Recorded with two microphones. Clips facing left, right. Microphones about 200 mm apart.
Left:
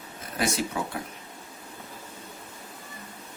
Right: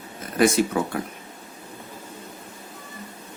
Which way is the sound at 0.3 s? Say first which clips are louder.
Right 9 dB; 55° right (ahead or behind).